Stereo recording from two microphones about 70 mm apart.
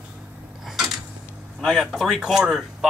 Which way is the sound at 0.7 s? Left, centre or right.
Centre.